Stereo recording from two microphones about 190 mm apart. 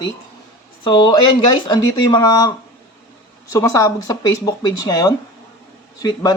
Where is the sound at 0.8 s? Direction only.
25° left (ahead or behind).